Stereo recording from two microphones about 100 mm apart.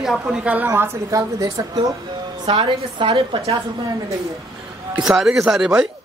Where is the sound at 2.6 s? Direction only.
55° right (ahead or behind).